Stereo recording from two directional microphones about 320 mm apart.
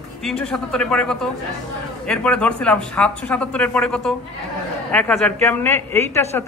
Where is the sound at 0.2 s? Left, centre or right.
Centre.